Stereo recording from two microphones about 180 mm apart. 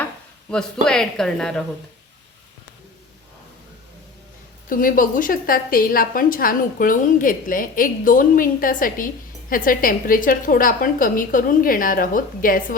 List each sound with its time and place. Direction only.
0.5 s speech: 5° left (ahead or behind)
4.7 s a woman's voice: 50° left (ahead or behind)